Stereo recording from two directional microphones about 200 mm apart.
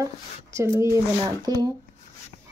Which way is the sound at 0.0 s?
15° right (ahead or behind).